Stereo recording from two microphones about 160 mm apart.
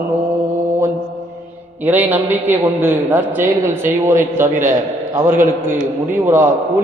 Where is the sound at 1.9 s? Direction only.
10° right (ahead or behind).